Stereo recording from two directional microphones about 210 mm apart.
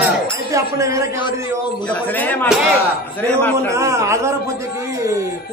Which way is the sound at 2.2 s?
10° left (ahead or behind).